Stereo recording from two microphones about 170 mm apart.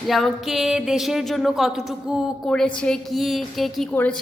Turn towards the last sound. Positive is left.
turn(degrees=10)  # may be behind; listen again after turning